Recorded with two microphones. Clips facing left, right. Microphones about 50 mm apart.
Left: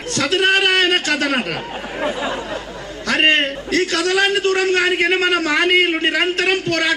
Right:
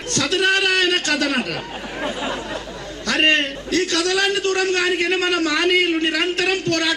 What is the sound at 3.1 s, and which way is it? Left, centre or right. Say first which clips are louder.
A man's voice: left 2 dB; left.